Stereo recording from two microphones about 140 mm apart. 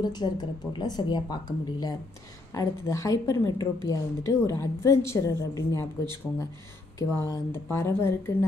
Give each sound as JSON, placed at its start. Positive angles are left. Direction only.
{"t": 0.0, "sound": "a woman's voice", "side_deg": 30}
{"t": 7.0, "sound": "a woman's voice", "side_deg": 20}